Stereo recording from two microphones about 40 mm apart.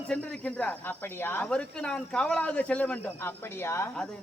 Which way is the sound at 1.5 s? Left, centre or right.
Left.